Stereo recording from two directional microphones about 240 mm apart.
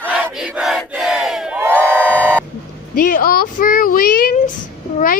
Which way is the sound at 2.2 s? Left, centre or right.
Centre.